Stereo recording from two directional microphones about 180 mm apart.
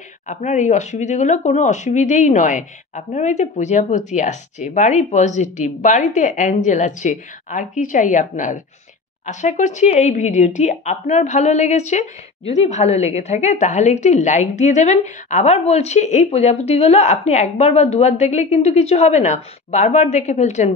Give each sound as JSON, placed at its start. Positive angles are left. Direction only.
{"t": 0.3, "sound": "speech", "side_deg": 40}